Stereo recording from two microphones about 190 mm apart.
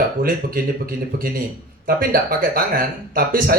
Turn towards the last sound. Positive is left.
turn(degrees=-50)  # may be behind; listen again after turning